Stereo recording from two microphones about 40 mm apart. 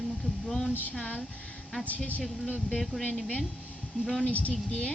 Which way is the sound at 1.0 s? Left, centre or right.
Left.